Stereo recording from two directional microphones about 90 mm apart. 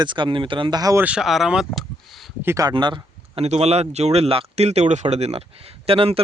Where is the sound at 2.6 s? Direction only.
55° right (ahead or behind).